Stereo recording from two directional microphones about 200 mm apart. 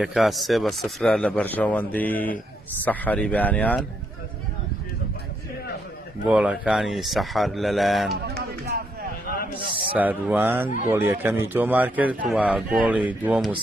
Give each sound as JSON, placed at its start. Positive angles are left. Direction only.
{"t": 0.0, "sound": "speech", "side_deg": 0}
{"t": 6.2, "sound": "speech", "side_deg": -5}
{"t": 8.6, "sound": "a sound", "side_deg": -50}
{"t": 9.9, "sound": "a man's voice", "side_deg": -10}